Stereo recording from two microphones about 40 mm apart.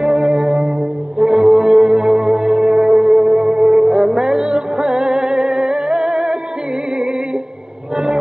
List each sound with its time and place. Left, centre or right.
0.0 s music: right
1.9 s music: centre; by 4.0 s right
4.1 s music: centre